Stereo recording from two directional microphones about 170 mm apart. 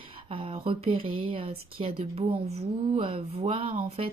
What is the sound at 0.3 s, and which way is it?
Speech, 35° right (ahead or behind).